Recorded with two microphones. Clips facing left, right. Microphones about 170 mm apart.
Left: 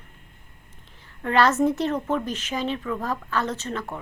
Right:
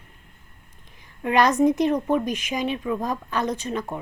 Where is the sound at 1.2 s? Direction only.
15° right (ahead or behind).